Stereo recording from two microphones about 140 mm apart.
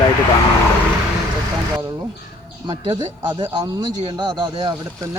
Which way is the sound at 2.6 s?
35° right (ahead or behind).